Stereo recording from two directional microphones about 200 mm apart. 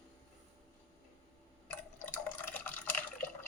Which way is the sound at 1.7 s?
10° left (ahead or behind).